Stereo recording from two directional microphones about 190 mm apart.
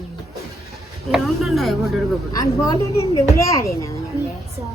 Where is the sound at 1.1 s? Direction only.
Centre (ahead or behind).